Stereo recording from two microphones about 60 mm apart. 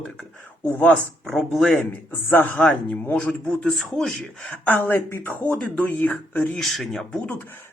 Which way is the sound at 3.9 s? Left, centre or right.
Centre.